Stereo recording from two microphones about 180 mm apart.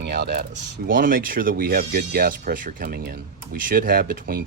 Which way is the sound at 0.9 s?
50° right (ahead or behind).